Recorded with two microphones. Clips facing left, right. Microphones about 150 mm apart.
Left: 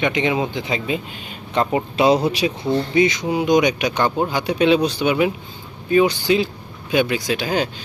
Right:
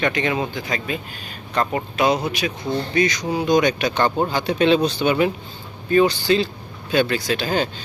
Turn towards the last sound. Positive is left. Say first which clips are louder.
# left 1 dB
turn(degrees=10)  # may be behind; listen again after turning